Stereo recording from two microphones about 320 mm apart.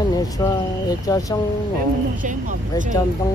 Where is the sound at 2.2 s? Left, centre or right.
Right.